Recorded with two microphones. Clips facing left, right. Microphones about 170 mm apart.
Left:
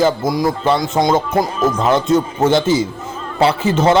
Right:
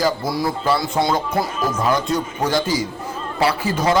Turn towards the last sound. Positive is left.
turn(degrees=25)  # may be behind; listen again after turning